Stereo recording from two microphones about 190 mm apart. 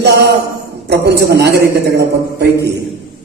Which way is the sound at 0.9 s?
60° right (ahead or behind).